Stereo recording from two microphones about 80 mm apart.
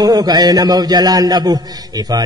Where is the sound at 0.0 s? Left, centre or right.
Right.